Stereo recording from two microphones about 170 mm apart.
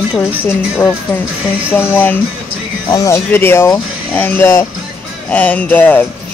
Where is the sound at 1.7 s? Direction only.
10° left (ahead or behind).